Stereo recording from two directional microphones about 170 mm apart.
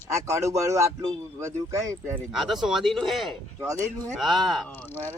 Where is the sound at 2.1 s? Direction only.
Centre (ahead or behind).